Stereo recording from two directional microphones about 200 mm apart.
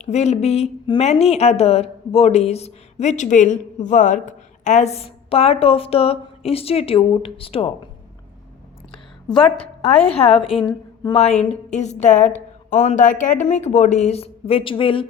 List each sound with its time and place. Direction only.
0.0 s speech: 35° left (ahead or behind)
9.3 s a woman's voice: 5° left (ahead or behind)
9.8 s a woman's voice: 30° left (ahead or behind)